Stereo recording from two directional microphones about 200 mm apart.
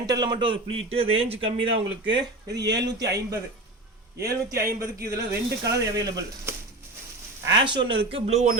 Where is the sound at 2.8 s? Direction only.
20° right (ahead or behind).